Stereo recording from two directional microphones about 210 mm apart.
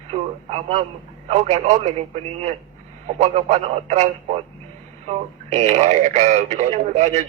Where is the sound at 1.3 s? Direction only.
35° right (ahead or behind).